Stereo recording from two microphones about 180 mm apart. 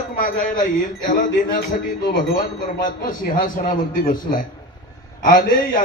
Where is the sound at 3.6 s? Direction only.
50° left (ahead or behind).